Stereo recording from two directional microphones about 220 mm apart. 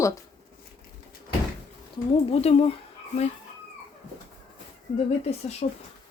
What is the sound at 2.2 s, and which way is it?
Speech, 30° left (ahead or behind).